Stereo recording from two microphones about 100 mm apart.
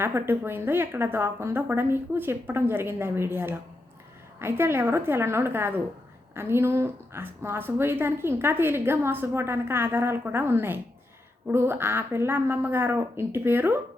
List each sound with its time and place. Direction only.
0.0 s a woman's voice: 25° right (ahead or behind)